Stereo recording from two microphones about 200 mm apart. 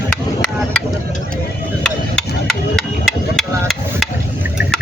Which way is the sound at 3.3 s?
Centre (ahead or behind).